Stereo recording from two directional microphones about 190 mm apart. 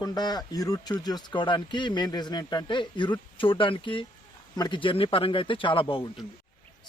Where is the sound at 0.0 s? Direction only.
20° left (ahead or behind).